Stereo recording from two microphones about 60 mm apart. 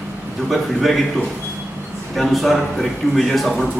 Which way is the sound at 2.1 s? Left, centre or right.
Centre.